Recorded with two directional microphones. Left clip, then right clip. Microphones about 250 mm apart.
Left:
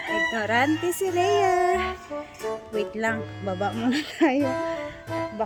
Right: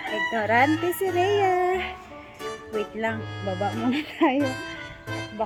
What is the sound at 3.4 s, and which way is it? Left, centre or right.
Music, centre.